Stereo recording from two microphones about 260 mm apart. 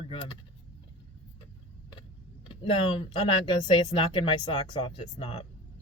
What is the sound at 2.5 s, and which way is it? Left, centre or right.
A man's voice, centre.